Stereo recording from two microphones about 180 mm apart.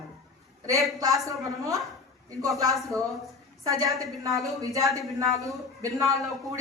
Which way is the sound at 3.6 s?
20° right (ahead or behind).